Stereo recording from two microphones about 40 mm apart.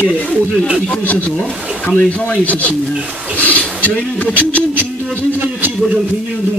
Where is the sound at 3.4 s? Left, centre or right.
Left.